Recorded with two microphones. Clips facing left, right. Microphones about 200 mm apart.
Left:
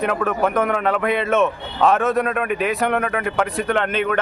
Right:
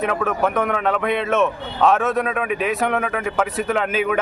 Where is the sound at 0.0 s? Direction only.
Centre (ahead or behind).